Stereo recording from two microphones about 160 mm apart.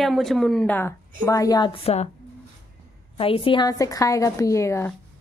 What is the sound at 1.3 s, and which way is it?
Speech, 20° left (ahead or behind).